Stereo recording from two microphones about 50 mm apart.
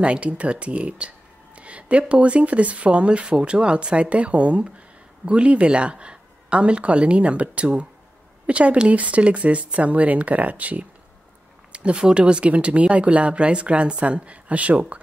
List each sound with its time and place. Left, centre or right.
0.0 s speech: right